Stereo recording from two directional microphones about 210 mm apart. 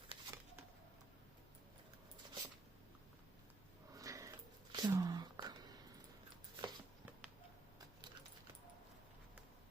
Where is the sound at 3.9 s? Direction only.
15° right (ahead or behind).